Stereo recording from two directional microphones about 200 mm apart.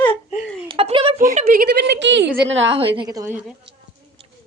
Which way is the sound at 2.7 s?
25° right (ahead or behind).